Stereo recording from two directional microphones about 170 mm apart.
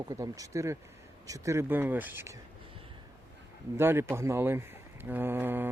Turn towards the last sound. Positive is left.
turn(degrees=-10)  # may be behind; listen again after turning